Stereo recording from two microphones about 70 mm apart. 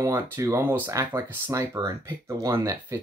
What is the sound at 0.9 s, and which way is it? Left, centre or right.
Speech, right.